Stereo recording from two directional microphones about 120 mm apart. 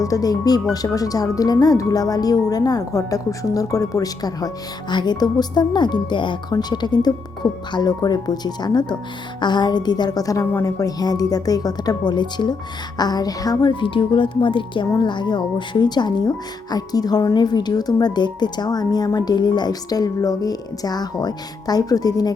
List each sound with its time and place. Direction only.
0.0 s speech: 30° left (ahead or behind)